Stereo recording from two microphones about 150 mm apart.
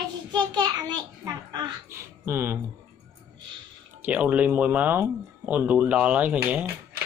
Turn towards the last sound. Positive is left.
turn(degrees=-10)  # may be behind; listen again after turning